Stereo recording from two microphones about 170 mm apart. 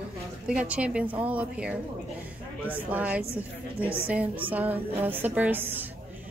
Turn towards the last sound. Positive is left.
turn(degrees=-10)  # may be behind; listen again after turning